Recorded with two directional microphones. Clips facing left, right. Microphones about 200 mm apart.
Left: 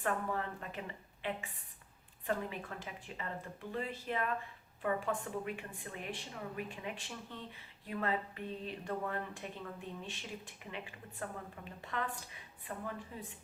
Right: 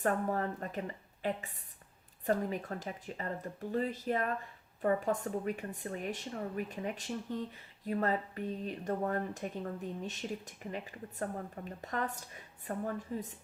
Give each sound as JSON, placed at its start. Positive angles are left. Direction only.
{"t": 0.0, "sound": "a woman's voice", "side_deg": -40}